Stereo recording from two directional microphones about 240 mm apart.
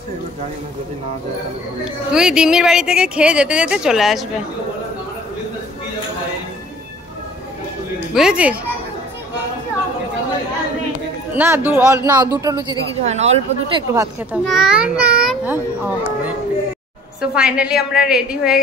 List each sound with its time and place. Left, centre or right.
2.0 s a woman's voice: centre
8.1 s a woman's voice: centre
11.3 s a child's voice: centre
14.3 s a woman's voice: centre